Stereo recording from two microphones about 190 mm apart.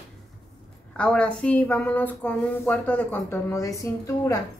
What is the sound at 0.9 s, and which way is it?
A woman's voice, 5° left (ahead or behind).